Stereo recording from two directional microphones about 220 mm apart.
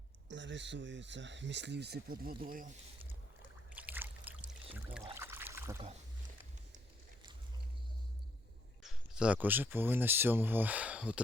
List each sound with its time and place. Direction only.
0.3 s speech: 55° right (ahead or behind); by 2.7 s 40° right (ahead or behind)
3.7 s boat: 5° right (ahead or behind)
5.1 s a sound: 10° right (ahead or behind)
8.8 s speech: centre (ahead or behind)